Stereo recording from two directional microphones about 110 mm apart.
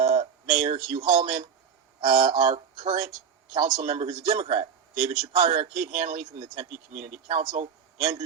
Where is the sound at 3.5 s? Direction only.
55° right (ahead or behind).